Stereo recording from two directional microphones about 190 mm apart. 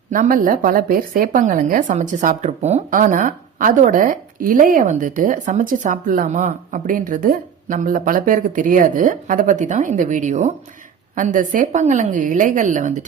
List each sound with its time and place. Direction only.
0.1 s a woman's voice: 45° right (ahead or behind)